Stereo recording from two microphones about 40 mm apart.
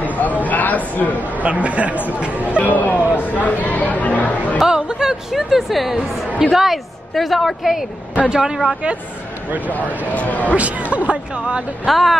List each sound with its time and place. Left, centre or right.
0.2 s a sound: left
1.3 s speech: right
2.4 s speech: left
4.6 s speech: centre
5.3 s a woman's voice: centre
8.3 s speech: centre
9.7 s speech: left
10.5 s speech: right
11.8 s speech: centre